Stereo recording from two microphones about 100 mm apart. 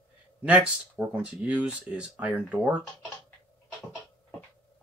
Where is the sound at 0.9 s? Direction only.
15° right (ahead or behind).